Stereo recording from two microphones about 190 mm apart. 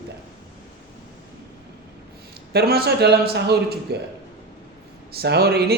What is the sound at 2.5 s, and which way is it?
Speech, 55° right (ahead or behind).